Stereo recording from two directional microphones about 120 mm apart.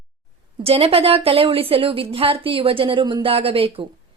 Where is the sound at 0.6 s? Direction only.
55° right (ahead or behind).